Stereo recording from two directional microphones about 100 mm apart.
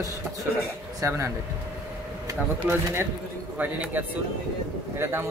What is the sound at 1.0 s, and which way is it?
Speech, 25° right (ahead or behind).